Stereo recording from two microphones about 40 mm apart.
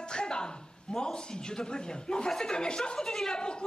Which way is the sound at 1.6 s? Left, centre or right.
Left.